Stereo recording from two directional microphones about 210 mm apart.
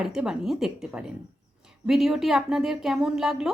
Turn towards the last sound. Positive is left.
turn(degrees=0)  # may be behind; listen again after turning